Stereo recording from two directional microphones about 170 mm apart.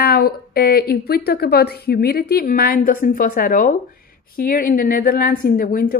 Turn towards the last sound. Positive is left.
turn(degrees=60)  # may be behind; listen again after turning